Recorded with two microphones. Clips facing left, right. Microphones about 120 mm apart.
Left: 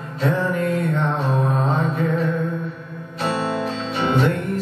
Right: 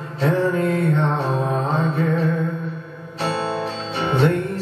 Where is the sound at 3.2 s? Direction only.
30° right (ahead or behind).